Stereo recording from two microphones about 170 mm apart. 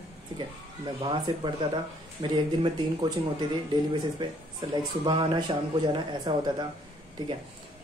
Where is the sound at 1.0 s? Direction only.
25° right (ahead or behind).